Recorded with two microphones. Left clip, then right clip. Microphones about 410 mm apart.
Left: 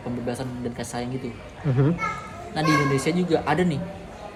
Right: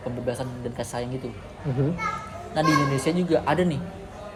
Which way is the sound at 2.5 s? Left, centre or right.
Centre.